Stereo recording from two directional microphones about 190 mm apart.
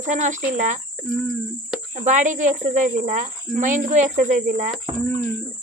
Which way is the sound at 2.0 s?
40° right (ahead or behind).